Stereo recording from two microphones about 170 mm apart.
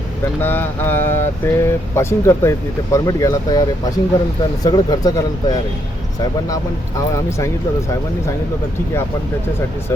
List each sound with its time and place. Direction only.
0.4 s speech: 10° left (ahead or behind)
4.6 s speech: 20° left (ahead or behind)